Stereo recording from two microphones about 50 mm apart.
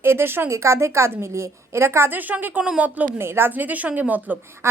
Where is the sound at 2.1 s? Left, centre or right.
Right.